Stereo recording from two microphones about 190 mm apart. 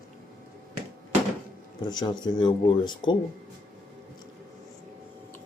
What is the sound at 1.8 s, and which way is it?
Speech, 20° left (ahead or behind).